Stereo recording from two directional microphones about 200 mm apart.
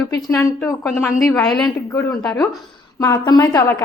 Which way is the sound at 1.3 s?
5° left (ahead or behind).